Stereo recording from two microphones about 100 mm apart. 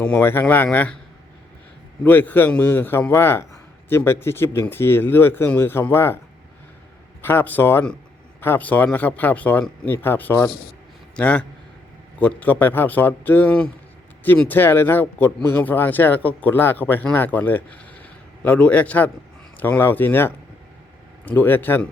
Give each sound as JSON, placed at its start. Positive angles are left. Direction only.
{"t": 0.0, "sound": "a man's voice", "side_deg": 10}
{"t": 2.0, "sound": "speech", "side_deg": 20}
{"t": 7.2, "sound": "a man's voice", "side_deg": 20}